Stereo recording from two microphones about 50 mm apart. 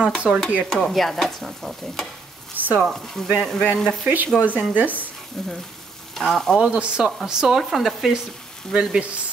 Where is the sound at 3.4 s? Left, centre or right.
Centre.